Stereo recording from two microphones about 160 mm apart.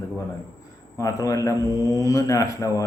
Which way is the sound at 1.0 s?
20° left (ahead or behind).